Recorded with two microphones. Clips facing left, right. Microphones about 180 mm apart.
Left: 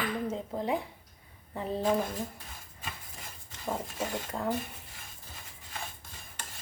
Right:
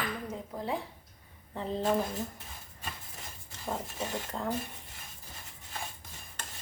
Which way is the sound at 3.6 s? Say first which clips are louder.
Left 2 dB; 5° left (ahead or behind).